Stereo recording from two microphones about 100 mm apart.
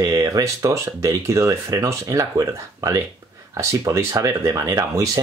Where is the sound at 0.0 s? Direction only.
35° right (ahead or behind).